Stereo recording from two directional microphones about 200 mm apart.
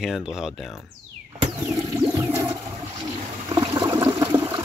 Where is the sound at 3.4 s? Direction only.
20° right (ahead or behind).